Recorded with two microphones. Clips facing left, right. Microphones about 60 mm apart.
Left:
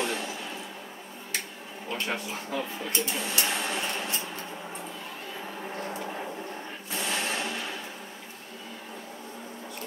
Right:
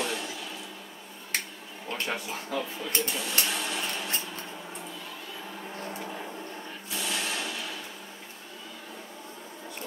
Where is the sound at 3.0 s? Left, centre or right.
Left.